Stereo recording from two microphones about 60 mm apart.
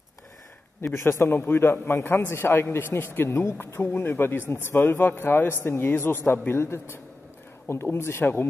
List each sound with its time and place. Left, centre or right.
0.8 s a man's voice: left